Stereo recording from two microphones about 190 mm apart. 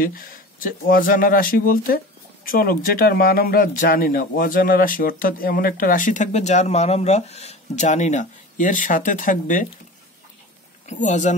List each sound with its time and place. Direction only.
0.0 s speech: 45° left (ahead or behind)
10.9 s speech: 40° left (ahead or behind)